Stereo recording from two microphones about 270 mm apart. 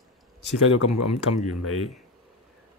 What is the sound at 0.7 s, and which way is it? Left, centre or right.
Speech, left.